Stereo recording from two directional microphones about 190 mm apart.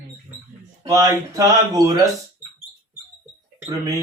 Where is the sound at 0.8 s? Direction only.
20° right (ahead or behind).